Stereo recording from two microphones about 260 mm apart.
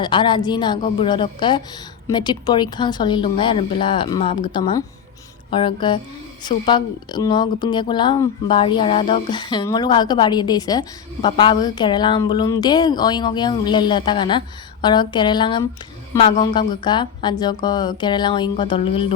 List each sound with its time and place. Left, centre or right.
0.0 s a woman's voice: centre